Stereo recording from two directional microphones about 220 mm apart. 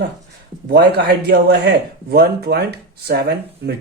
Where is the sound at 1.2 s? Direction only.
50° right (ahead or behind).